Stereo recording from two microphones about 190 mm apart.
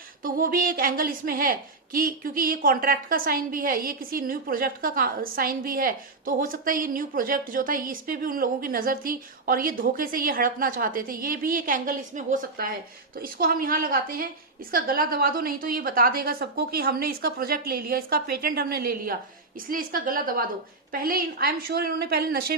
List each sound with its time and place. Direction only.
0.2 s a woman's voice: 50° right (ahead or behind)